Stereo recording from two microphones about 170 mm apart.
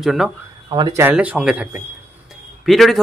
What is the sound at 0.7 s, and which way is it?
Speech, 25° right (ahead or behind).